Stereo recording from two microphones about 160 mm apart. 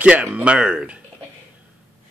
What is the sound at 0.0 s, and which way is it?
Speech, 5° right (ahead or behind).